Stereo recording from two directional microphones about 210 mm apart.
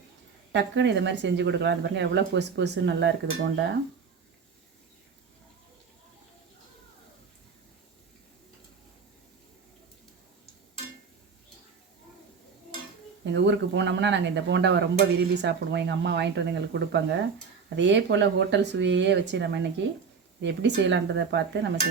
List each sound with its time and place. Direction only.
0.5 s speech: 55° right (ahead or behind)
13.2 s speech: 55° right (ahead or behind)